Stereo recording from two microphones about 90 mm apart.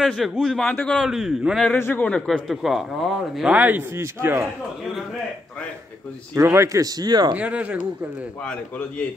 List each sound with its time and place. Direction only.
0.0 s speech: centre (ahead or behind)
1.8 s speech: 20° left (ahead or behind)
2.0 s a man's voice: 10° left (ahead or behind)
2.4 s speech: 5° right (ahead or behind)
3.5 s a man's voice: 20° right (ahead or behind)
6.3 s speech: 30° right (ahead or behind); by 7.3 s 50° right (ahead or behind)
7.3 s speech: 15° right (ahead or behind)
8.5 s a man's voice: 15° left (ahead or behind)